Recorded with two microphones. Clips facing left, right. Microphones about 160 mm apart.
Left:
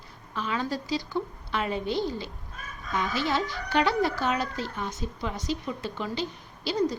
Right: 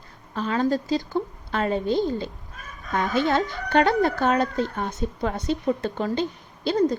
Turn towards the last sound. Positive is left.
turn(degrees=-50)  # may be behind; listen again after turning